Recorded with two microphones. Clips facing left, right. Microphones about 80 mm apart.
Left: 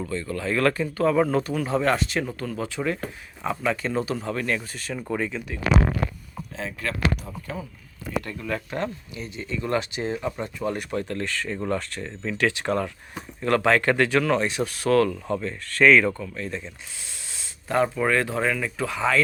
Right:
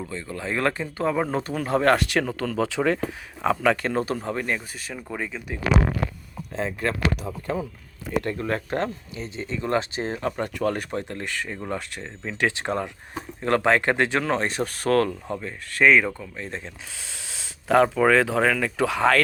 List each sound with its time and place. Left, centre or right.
0.1 s speech: centre
1.5 s speech: right
4.4 s speech: centre
6.6 s speech: right
7.3 s speech: right
8.2 s speech: right
10.2 s speech: right
10.9 s speech: centre
14.4 s speech: right
15.3 s speech: centre
16.5 s speech: right
17.1 s speech: right